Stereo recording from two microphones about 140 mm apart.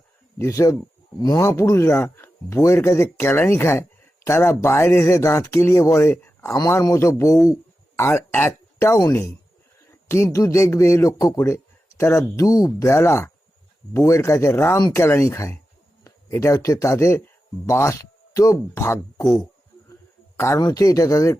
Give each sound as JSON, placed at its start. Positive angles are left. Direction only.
{"t": 0.3, "sound": "speech", "side_deg": 20}
{"t": 20.3, "sound": "speech", "side_deg": 15}